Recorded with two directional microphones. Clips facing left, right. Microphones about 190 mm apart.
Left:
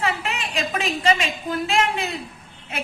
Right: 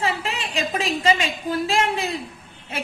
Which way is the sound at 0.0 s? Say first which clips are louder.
Even; 30° right (ahead or behind).